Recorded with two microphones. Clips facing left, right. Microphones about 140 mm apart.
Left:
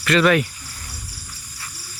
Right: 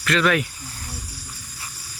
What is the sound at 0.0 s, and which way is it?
Speech, centre (ahead or behind).